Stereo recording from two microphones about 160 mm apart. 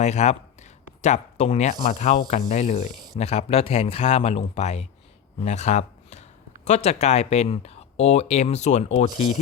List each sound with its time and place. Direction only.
0.0 s speech: 45° left (ahead or behind)
3.2 s a man's voice: 40° left (ahead or behind)